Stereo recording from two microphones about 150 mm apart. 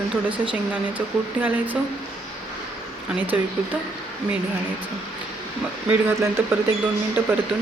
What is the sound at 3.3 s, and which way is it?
Speech, 10° right (ahead or behind).